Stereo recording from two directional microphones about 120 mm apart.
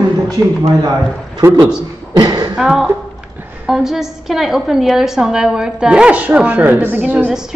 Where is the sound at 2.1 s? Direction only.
35° right (ahead or behind).